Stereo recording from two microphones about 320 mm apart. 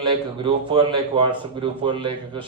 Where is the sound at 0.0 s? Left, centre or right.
Centre.